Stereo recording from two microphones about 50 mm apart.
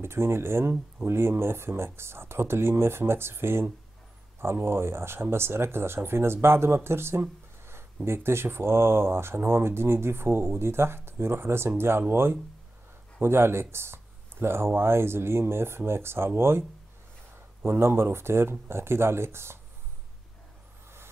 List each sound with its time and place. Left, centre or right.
0.0 s speech: right
17.6 s speech: right